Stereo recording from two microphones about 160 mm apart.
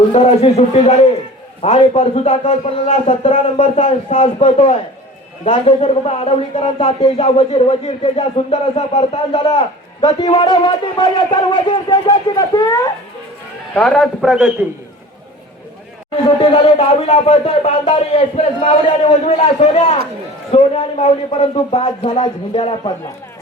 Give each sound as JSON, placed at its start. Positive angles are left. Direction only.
{"t": 0.1, "sound": "a man's voice", "side_deg": 40}
{"t": 13.7, "sound": "a man's voice", "side_deg": 5}
{"t": 16.2, "sound": "a man's voice", "side_deg": 30}